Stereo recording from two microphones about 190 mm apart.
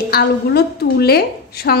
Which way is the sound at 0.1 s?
55° left (ahead or behind).